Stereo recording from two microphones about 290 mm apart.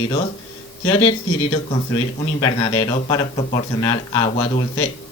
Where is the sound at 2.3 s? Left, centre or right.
Centre.